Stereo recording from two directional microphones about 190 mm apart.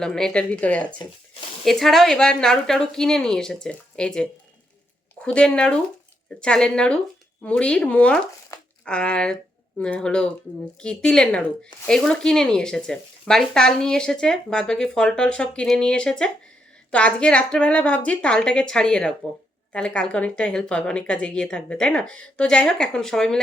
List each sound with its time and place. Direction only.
0.0 s speech: 5° left (ahead or behind)
0.9 s speech: 25° left (ahead or behind)
1.6 s speech: centre (ahead or behind)